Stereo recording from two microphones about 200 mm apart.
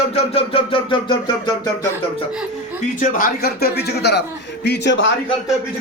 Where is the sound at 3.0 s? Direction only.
45° left (ahead or behind); by 5.1 s 65° left (ahead or behind).